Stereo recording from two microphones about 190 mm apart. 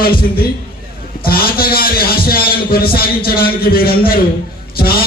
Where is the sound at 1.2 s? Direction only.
50° left (ahead or behind).